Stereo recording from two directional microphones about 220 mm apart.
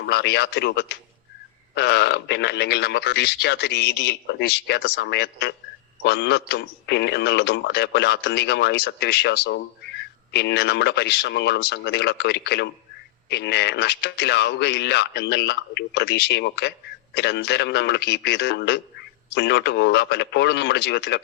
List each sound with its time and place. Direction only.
0.1 s a man's voice: 50° left (ahead or behind)